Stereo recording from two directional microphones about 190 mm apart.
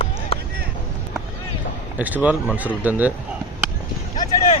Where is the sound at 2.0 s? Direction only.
10° right (ahead or behind).